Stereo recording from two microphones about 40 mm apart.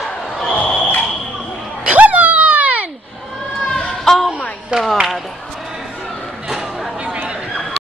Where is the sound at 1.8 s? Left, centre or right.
Right.